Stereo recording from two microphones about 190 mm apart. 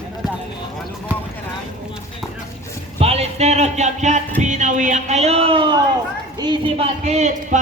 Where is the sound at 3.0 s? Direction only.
30° right (ahead or behind).